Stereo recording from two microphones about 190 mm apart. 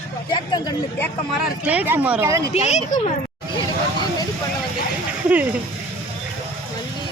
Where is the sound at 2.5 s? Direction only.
35° left (ahead or behind).